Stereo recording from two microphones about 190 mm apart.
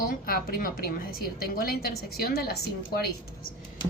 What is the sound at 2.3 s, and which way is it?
Speech, 55° left (ahead or behind).